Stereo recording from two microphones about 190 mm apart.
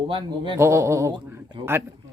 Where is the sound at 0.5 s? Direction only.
15° right (ahead or behind).